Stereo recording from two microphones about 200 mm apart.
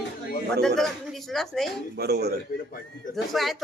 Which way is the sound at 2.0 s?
55° right (ahead or behind).